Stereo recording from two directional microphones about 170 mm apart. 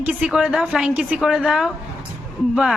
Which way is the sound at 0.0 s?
5° right (ahead or behind).